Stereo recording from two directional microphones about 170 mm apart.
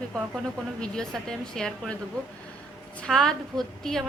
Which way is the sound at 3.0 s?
5° left (ahead or behind).